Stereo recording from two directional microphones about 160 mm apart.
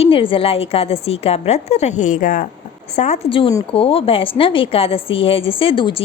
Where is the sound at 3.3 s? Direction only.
35° left (ahead or behind).